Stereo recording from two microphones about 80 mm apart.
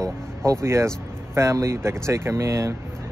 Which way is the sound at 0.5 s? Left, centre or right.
Right.